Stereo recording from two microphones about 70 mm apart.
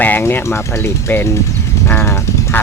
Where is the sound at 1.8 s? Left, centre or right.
Left.